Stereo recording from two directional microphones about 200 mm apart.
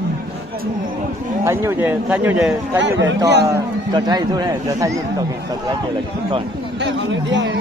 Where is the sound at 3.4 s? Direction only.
20° right (ahead or behind).